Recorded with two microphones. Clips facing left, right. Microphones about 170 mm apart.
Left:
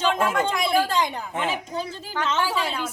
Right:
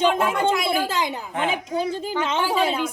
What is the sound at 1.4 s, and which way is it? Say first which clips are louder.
Speech: right 4 dB; 55° right (ahead or behind).